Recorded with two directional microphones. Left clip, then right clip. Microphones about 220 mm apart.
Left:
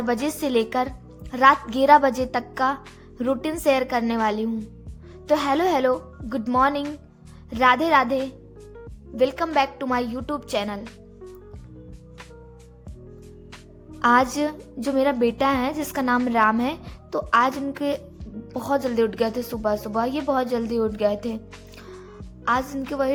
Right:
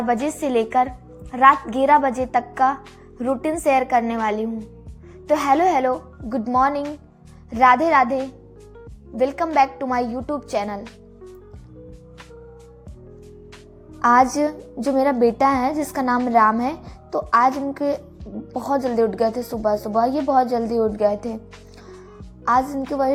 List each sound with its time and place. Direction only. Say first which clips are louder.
0.0 s a woman's voice: right 3 dB; 15° left (ahead or behind)
10.8 s music: right 2 dB; centre (ahead or behind)
14.0 s a woman's voice: right 3 dB; 15° left (ahead or behind)
16.6 s a woman's voice: right 2 dB; 20° left (ahead or behind)
19.9 s speech: right 5 dB; centre (ahead or behind)
20.4 s a woman's voice: right 4 dB; 20° left (ahead or behind)
22.5 s speech: right 6 dB; centre (ahead or behind)